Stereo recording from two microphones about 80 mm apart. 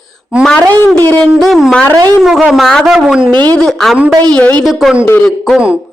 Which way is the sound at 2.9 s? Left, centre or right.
Centre.